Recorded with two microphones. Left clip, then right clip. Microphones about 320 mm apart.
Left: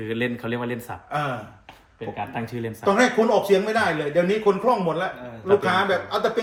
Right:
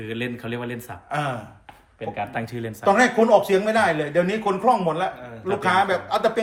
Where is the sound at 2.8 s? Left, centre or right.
Right.